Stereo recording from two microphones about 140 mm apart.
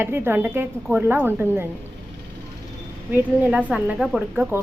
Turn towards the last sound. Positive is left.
turn(degrees=-15)  # may be behind; listen again after turning